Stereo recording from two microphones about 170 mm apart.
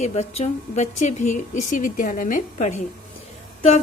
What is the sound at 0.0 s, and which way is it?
A woman's voice, 40° left (ahead or behind).